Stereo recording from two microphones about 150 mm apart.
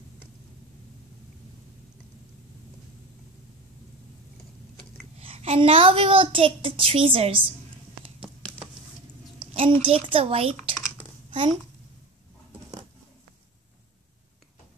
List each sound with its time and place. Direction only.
5.2 s a woman's voice: 40° right (ahead or behind)
9.4 s a child's voice: 35° right (ahead or behind)
11.2 s a sound: 35° right (ahead or behind)